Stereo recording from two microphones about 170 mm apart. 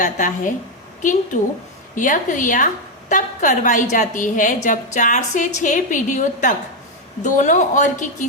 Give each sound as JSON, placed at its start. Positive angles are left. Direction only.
{"t": 0.0, "sound": "a woman's voice", "side_deg": 50}
{"t": 2.0, "sound": "a woman's voice", "side_deg": 50}